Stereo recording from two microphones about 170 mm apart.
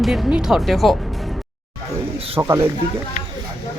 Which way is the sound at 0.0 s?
Centre (ahead or behind).